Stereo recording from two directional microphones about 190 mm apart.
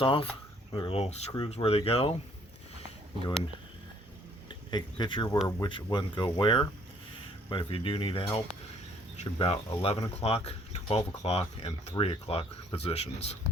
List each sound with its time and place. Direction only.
0.0 s speech: 30° left (ahead or behind)
4.4 s speech: 25° left (ahead or behind)